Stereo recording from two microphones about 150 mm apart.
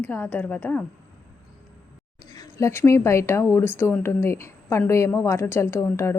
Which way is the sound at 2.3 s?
25° left (ahead or behind).